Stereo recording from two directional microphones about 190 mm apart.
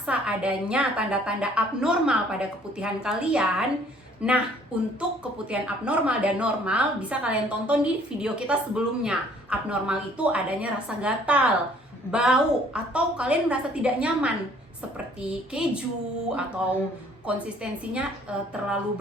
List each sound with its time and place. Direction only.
0.0 s speech: 5° right (ahead or behind)